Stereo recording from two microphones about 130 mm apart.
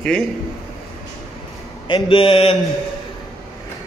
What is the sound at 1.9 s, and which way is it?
Speech, 40° left (ahead or behind).